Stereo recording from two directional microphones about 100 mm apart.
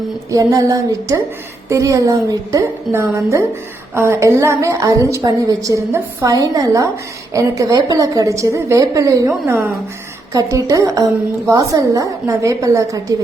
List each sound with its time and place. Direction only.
0.3 s a woman's voice: 35° right (ahead or behind)